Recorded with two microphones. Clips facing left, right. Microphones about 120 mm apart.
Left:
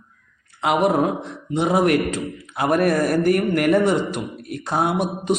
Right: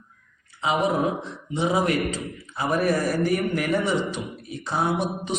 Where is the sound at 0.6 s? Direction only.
65° left (ahead or behind).